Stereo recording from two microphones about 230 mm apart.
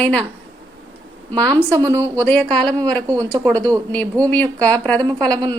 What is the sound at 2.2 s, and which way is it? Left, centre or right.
Speech, centre.